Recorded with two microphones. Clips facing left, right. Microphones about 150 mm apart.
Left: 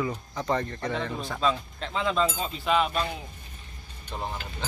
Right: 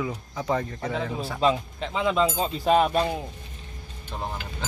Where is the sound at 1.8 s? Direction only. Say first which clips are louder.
Right 2 dB; 5° right (ahead or behind).